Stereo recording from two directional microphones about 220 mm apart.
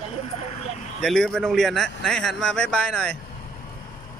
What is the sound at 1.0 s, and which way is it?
A man's voice, centre (ahead or behind).